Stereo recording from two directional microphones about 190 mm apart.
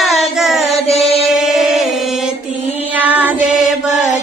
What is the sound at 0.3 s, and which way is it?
Child singing, centre (ahead or behind).